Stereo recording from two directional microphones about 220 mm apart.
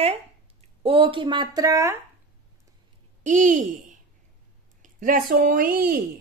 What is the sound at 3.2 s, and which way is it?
A woman's voice, 35° right (ahead or behind).